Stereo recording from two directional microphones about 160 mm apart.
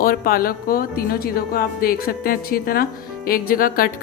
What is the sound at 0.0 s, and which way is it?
A woman's voice, 65° left (ahead or behind).